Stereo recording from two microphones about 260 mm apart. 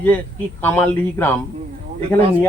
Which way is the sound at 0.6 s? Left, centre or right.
Centre.